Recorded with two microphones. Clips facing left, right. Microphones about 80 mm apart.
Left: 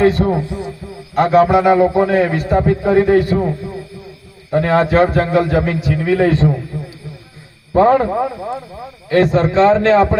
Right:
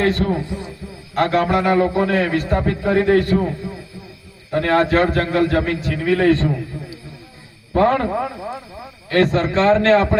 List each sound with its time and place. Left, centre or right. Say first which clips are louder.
0.0 s a man's voice: left 5 dB; centre
4.5 s a man's voice: left 3 dB; centre
7.7 s a man's voice: left 5 dB; centre
9.0 s a man's voice: left 4 dB; centre